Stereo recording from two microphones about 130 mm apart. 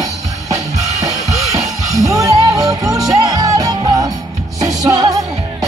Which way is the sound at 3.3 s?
25° right (ahead or behind).